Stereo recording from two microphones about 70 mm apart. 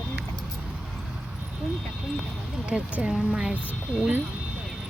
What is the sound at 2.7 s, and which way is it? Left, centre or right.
Speech, centre.